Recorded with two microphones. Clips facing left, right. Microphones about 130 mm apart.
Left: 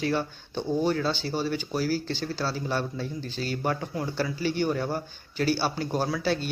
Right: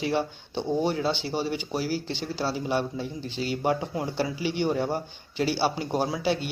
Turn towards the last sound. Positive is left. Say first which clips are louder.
# right 1 dB
turn(degrees=-20)  # may be behind; listen again after turning